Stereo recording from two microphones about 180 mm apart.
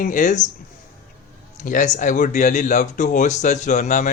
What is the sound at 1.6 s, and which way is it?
Speech, 45° left (ahead or behind).